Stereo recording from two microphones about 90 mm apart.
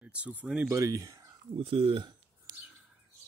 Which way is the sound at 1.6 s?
90° right.